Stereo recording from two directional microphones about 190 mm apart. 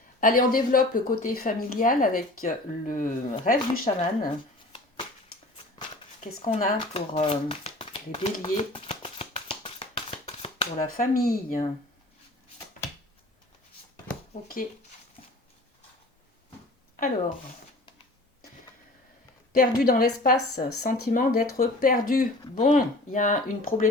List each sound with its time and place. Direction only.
0.2 s a woman's voice: 50° left (ahead or behind)
6.1 s speech: 30° left (ahead or behind)
6.7 s a sound: 30° left (ahead or behind)
10.9 s a woman's voice: 50° left (ahead or behind)
14.4 s a woman's voice: 50° left (ahead or behind)
19.5 s a woman's voice: 50° left (ahead or behind)